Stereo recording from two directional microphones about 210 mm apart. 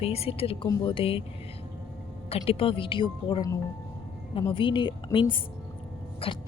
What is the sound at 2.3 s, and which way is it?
A woman's voice, 25° left (ahead or behind).